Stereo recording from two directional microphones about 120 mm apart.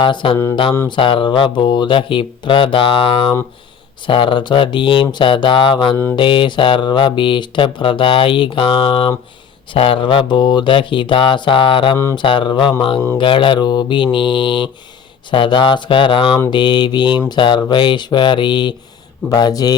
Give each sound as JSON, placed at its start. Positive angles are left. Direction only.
{"t": 0.0, "sound": "speech", "side_deg": 45}